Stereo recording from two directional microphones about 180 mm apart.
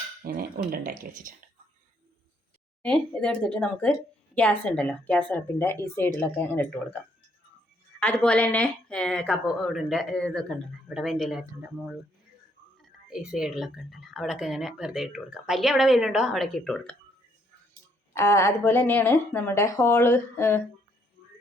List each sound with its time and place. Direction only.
0.3 s speech: 55° right (ahead or behind)
2.8 s a woman's voice: 5° left (ahead or behind)
13.1 s speech: 5° right (ahead or behind)
18.1 s a woman's voice: 15° left (ahead or behind)